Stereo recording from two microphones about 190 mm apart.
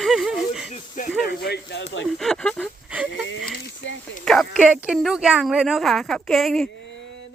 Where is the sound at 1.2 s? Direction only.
60° left (ahead or behind).